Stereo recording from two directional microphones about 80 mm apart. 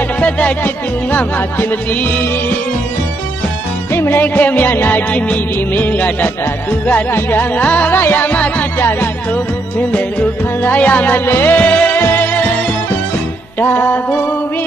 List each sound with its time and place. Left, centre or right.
0.2 s music: centre
3.9 s music: left
10.6 s music: centre
13.6 s music: left